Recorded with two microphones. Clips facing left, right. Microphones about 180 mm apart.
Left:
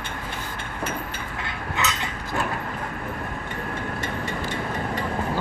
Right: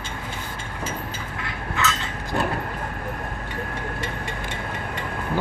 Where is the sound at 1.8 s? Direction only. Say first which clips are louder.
Right 5 dB; 20° left (ahead or behind).